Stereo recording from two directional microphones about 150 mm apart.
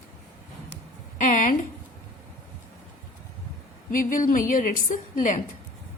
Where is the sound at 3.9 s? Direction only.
65° left (ahead or behind).